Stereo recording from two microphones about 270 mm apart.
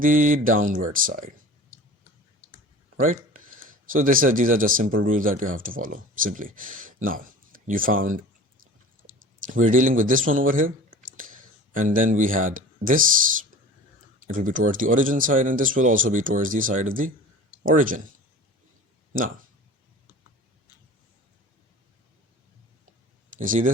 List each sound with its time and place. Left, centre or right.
0.0 s speech: right
3.0 s a sound: right
3.8 s speech: right
14.3 s speech: right
23.4 s speech: right